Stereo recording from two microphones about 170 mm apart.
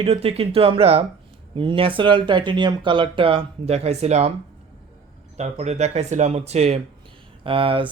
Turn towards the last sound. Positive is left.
turn(degrees=-30)  # may be behind; listen again after turning